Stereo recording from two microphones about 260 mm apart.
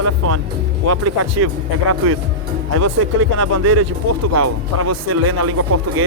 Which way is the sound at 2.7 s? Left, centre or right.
Right.